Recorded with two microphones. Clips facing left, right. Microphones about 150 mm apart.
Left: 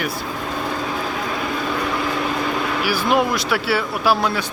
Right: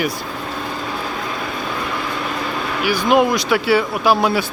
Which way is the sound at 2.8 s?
Centre (ahead or behind).